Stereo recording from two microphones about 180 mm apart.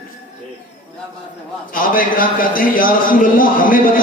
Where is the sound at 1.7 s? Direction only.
50° left (ahead or behind).